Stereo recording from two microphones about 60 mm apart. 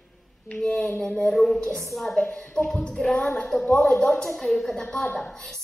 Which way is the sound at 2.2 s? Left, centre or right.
Centre.